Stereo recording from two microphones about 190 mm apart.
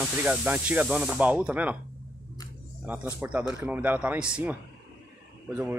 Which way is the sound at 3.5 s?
10° right (ahead or behind).